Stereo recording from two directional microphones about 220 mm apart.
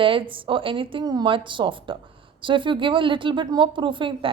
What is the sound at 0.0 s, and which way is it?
A woman's voice, 25° right (ahead or behind).